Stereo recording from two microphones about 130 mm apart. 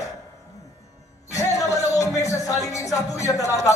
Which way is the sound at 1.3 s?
25° left (ahead or behind).